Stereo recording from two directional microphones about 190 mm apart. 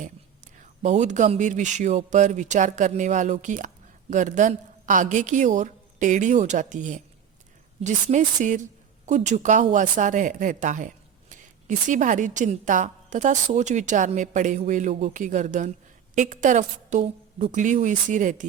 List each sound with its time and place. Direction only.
0.6 s a woman's voice: 40° right (ahead or behind)
11.9 s a woman's voice: 40° right (ahead or behind)